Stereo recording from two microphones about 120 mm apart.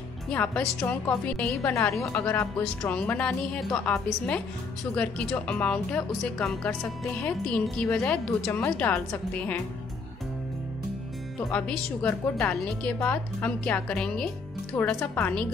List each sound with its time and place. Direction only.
0.3 s a woman's voice: 10° left (ahead or behind)
1.6 s speech: 25° left (ahead or behind)
2.6 s a woman's voice: 5° left (ahead or behind)
11.5 s a woman's voice: 10° left (ahead or behind)
14.8 s a woman's voice: 15° left (ahead or behind)